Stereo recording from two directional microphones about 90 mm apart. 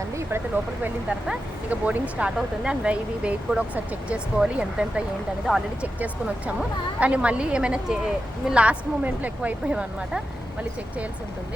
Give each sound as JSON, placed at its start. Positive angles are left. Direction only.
{"t": 0.3, "sound": "a woman's voice", "side_deg": -25}
{"t": 6.0, "sound": "a woman's voice", "side_deg": -15}